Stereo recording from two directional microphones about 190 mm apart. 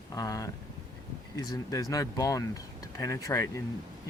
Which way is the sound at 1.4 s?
20° left (ahead or behind).